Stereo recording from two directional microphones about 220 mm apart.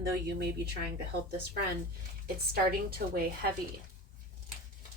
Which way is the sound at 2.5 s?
45° right (ahead or behind).